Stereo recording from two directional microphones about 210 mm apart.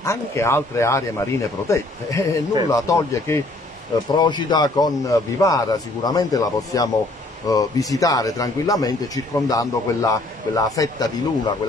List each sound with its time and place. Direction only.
0.0 s speech: 15° left (ahead or behind)